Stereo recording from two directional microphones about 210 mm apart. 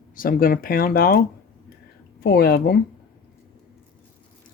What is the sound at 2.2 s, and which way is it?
Speech, 50° left (ahead or behind).